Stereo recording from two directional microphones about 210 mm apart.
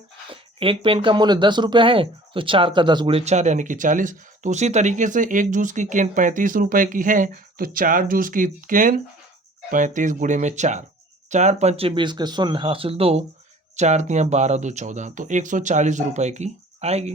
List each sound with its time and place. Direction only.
0.3 s speech: 25° right (ahead or behind)